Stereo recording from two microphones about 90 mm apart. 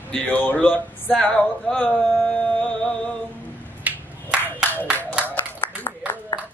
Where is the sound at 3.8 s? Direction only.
15° right (ahead or behind).